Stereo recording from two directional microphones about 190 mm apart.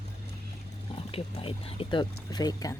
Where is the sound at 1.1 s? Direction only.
30° left (ahead or behind).